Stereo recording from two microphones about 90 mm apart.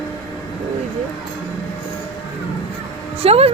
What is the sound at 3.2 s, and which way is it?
Speech, 90° right.